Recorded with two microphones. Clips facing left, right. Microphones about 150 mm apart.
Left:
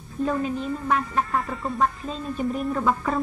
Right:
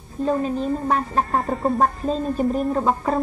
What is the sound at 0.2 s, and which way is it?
Speech, 35° right (ahead or behind).